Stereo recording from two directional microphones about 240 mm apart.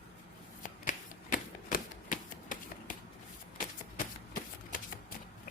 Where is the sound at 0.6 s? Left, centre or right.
Left.